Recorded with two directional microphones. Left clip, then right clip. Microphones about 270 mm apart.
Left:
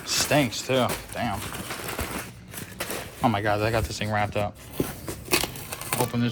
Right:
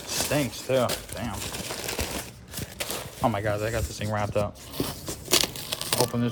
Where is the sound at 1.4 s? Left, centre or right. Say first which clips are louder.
Even; right.